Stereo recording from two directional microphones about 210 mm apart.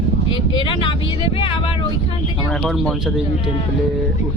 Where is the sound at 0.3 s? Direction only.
25° left (ahead or behind).